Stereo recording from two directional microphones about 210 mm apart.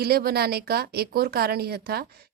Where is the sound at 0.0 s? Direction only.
50° right (ahead or behind).